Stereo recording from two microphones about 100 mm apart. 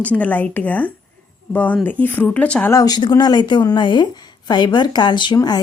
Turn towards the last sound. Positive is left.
turn(degrees=45)  # may be behind; listen again after turning